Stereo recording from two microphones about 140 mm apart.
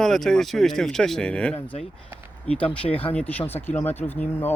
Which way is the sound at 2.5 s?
40° left (ahead or behind).